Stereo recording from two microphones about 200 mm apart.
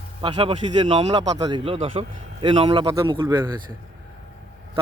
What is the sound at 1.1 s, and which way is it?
Speech, 20° right (ahead or behind).